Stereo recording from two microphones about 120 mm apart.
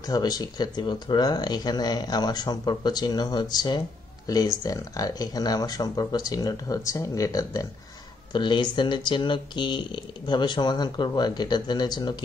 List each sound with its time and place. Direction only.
0.0 s speech: 30° left (ahead or behind)
8.3 s speech: 40° left (ahead or behind)